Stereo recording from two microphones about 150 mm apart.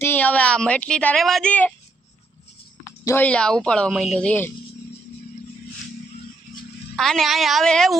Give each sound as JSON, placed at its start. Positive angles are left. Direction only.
{"t": 0.0, "sound": "speech", "side_deg": 15}
{"t": 3.0, "sound": "speech", "side_deg": 20}
{"t": 3.2, "sound": "speech", "side_deg": 5}
{"t": 6.9, "sound": "speech", "side_deg": 0}